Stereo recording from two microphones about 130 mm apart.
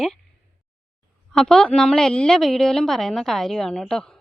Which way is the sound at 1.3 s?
5° left (ahead or behind).